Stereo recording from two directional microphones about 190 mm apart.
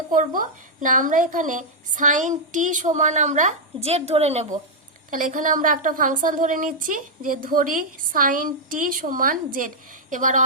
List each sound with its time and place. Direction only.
0.1 s a woman's voice: 45° right (ahead or behind)
5.1 s a woman's voice: 45° right (ahead or behind)